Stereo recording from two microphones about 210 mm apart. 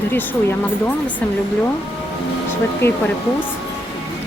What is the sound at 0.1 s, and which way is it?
Speech, 10° left (ahead or behind).